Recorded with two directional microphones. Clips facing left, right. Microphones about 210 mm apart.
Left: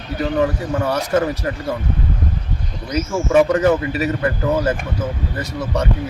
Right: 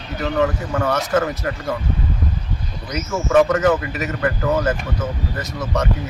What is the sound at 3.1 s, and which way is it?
Speech, 10° left (ahead or behind).